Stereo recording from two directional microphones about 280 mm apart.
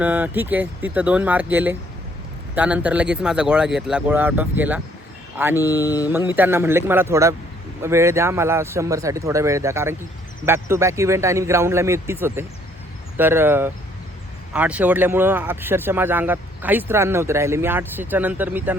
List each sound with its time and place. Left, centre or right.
0.0 s speech: centre
6.1 s speech: centre